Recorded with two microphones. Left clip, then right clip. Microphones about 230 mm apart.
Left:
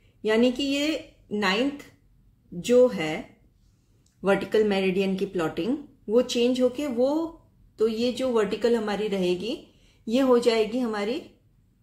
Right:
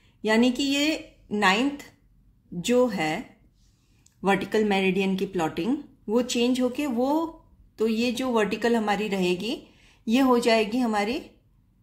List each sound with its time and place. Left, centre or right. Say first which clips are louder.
0.2 s a woman's voice: even; right
2.6 s a woman's voice: left 3 dB; right
4.2 s a woman's voice: left 1 dB; right